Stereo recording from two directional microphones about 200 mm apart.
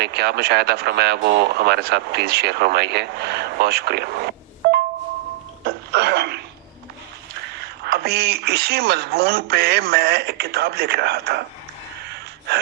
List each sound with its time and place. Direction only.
0.0 s speech: 55° right (ahead or behind)
4.6 s a sound: 55° right (ahead or behind)
7.9 s speech: 55° right (ahead or behind)